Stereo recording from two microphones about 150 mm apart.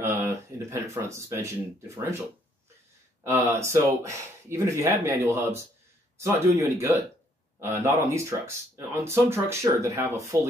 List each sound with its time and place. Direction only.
0.0 s speech: 20° right (ahead or behind)
3.3 s speech: 15° right (ahead or behind)